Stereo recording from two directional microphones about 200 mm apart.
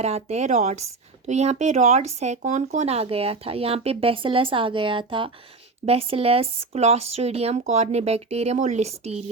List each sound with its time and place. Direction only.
0.0 s speech: 35° right (ahead or behind)